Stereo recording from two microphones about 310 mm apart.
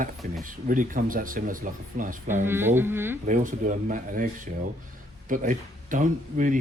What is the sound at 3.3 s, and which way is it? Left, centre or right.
Speech, right.